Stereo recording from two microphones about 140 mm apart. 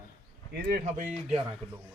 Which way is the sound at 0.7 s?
75° right (ahead or behind).